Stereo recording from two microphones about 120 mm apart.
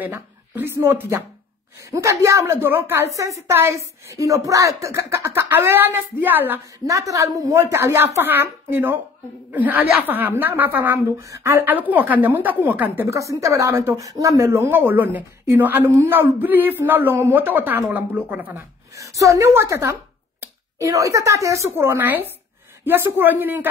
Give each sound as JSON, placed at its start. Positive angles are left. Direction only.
{"t": 0.0, "sound": "a woman's voice", "side_deg": -20}
{"t": 18.9, "sound": "a woman's voice", "side_deg": -25}